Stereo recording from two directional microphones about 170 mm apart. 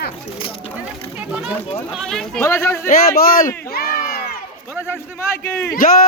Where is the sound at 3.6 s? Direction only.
55° left (ahead or behind).